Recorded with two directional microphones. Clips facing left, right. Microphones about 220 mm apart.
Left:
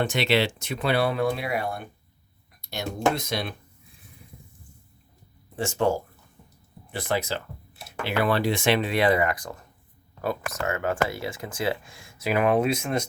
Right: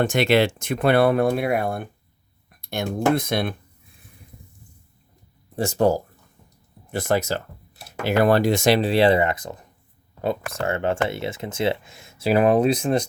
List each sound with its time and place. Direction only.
0.0 s speech: 50° right (ahead or behind)
5.5 s speech: 40° right (ahead or behind)